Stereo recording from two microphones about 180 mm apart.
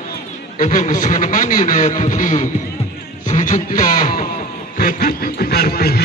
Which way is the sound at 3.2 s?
45° left (ahead or behind).